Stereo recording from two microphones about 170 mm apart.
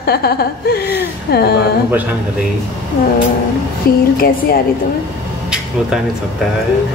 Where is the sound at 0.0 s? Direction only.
65° left (ahead or behind).